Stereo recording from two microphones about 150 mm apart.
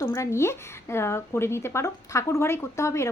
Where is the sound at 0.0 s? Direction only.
20° left (ahead or behind).